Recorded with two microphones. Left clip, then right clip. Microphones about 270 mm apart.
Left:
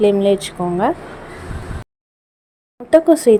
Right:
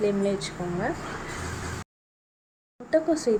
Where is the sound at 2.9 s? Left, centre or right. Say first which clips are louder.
Left 12 dB; left.